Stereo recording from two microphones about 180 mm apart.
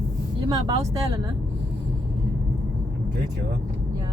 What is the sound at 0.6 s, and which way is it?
Speech, 20° right (ahead or behind).